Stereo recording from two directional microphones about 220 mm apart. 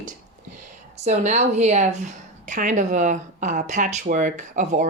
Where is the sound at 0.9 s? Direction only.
30° right (ahead or behind).